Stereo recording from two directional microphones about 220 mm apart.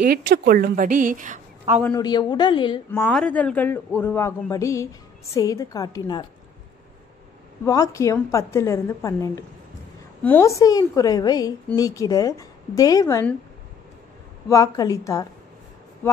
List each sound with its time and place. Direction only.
0.0 s a woman's voice: 45° right (ahead or behind)
1.8 s a woman's voice: 15° left (ahead or behind)
2.9 s a man's voice: 5° left (ahead or behind)
7.6 s a man's voice: 15° left (ahead or behind)
14.5 s a man's voice: 15° left (ahead or behind)